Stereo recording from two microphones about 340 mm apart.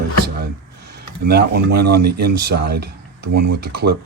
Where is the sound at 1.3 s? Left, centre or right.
Right.